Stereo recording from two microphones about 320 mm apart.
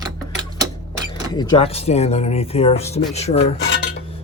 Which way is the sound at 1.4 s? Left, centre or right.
Centre.